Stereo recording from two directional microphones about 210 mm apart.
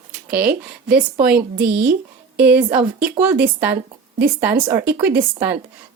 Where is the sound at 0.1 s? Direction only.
50° right (ahead or behind).